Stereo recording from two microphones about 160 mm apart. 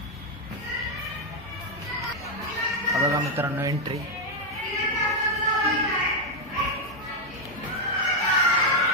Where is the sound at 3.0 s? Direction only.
20° right (ahead or behind).